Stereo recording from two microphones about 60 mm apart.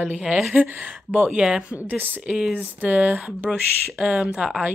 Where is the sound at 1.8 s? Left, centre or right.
Right.